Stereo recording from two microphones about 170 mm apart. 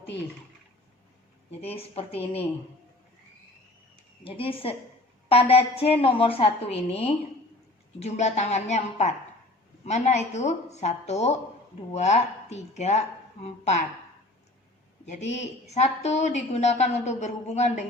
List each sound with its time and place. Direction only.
1.6 s a woman's voice: 35° left (ahead or behind)
4.2 s a woman's voice: 30° left (ahead or behind)
15.0 s a woman's voice: 40° left (ahead or behind)